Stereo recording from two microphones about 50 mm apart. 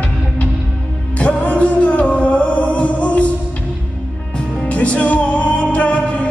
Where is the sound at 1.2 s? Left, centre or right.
Left.